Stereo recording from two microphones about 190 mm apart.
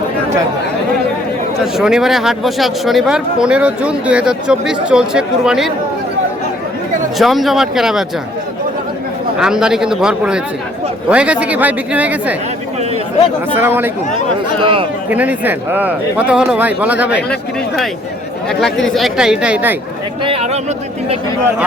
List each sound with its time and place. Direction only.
1.7 s speech: 5° right (ahead or behind)
7.2 s speech: centre (ahead or behind)
9.4 s speech: 5° right (ahead or behind)
13.6 s speech: 10° right (ahead or behind)
14.6 s speech: 25° right (ahead or behind)
15.1 s speech: 10° right (ahead or behind)
18.4 s speech: centre (ahead or behind)
20.2 s speech: 30° right (ahead or behind)